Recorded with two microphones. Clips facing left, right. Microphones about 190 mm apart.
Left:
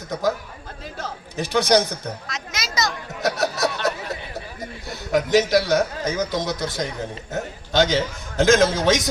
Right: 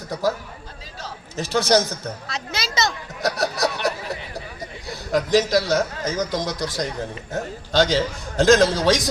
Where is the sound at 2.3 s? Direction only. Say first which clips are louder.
Right 3 dB; 30° right (ahead or behind).